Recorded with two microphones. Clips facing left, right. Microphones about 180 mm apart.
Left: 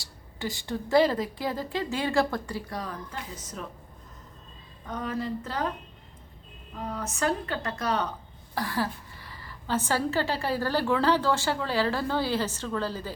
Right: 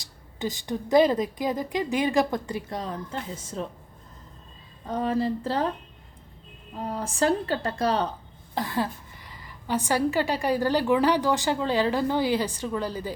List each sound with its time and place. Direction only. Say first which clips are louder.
0.0 s speech: right 3 dB; 20° right (ahead or behind)
4.9 s speech: right 6 dB; 30° right (ahead or behind)
6.7 s a woman's voice: right 5 dB; 30° right (ahead or behind)